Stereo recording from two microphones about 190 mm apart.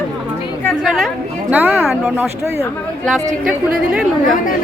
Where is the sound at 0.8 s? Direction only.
Centre (ahead or behind).